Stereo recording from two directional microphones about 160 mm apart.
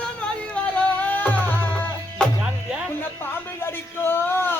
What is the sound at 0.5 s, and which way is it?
Music, 10° left (ahead or behind).